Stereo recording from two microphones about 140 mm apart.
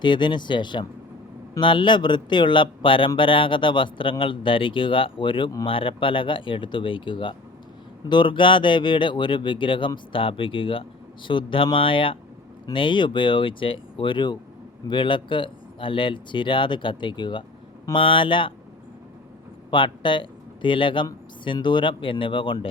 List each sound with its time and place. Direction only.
0.0 s speech: 35° left (ahead or behind)
19.7 s speech: 35° left (ahead or behind)